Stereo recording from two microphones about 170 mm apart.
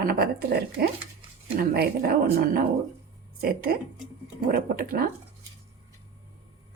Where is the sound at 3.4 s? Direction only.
60° right (ahead or behind).